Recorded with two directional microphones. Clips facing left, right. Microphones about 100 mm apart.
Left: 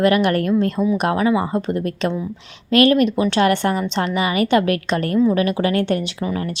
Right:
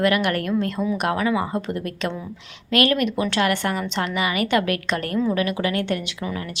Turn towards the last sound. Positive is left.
turn(degrees=35)  # may be behind; listen again after turning